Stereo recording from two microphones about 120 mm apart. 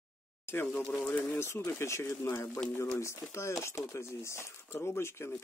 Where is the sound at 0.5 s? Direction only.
20° left (ahead or behind).